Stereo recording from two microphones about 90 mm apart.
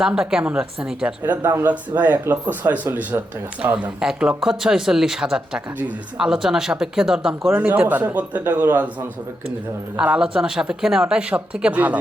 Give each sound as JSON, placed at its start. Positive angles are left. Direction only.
{"t": 0.0, "sound": "speech", "side_deg": -5}
{"t": 1.2, "sound": "speech", "side_deg": -25}
{"t": 7.5, "sound": "speech", "side_deg": -15}
{"t": 10.0, "sound": "speech", "side_deg": -10}